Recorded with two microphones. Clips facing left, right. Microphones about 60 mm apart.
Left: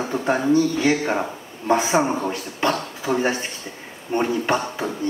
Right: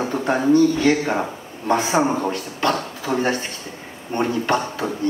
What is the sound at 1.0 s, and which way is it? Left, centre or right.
Speech, centre.